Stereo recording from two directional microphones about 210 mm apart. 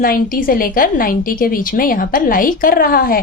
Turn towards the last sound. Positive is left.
turn(degrees=45)  # may be behind; listen again after turning